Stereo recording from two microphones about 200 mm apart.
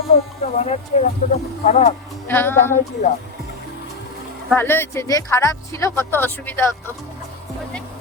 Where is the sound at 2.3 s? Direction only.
10° left (ahead or behind).